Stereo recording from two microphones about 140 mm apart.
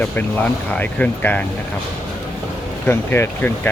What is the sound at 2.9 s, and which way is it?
Speech, 15° left (ahead or behind).